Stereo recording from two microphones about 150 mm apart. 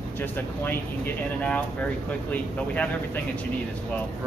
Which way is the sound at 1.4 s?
10° left (ahead or behind).